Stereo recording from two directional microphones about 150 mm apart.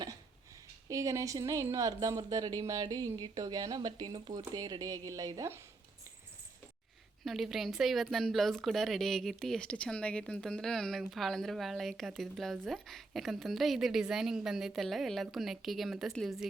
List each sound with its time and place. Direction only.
0.9 s a woman's voice: 20° right (ahead or behind)
7.3 s speech: centre (ahead or behind)